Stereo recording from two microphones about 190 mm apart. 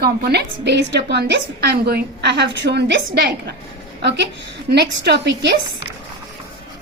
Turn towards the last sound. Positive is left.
turn(degrees=-65)  # may be behind; listen again after turning